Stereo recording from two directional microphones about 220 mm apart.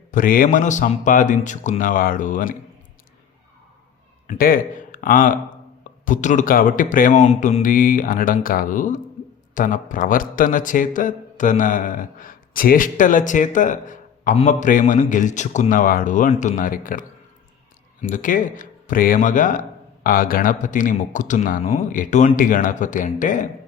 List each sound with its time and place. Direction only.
0.1 s a man's voice: 40° left (ahead or behind)
4.3 s a man's voice: 40° left (ahead or behind)